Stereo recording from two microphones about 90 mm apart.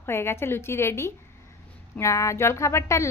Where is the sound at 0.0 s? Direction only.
25° left (ahead or behind).